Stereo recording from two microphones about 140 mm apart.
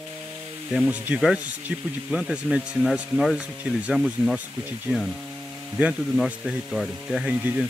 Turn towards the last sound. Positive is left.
turn(degrees=-10)  # may be behind; listen again after turning